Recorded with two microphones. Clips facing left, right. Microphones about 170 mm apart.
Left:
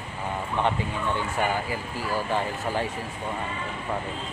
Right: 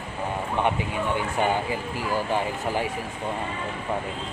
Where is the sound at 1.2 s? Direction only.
20° right (ahead or behind).